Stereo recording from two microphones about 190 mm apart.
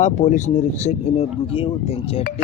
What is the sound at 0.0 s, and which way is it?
Speech, 40° left (ahead or behind).